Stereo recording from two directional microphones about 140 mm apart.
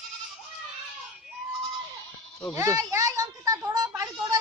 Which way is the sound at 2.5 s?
20° right (ahead or behind).